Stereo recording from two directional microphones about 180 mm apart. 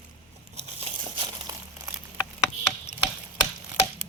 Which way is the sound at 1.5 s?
20° right (ahead or behind).